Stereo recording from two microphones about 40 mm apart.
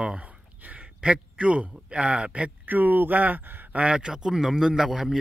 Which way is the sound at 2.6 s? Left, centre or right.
Right.